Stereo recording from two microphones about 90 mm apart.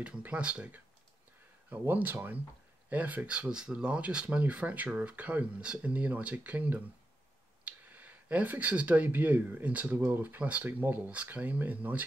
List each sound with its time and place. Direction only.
0.0 s speech: 15° right (ahead or behind)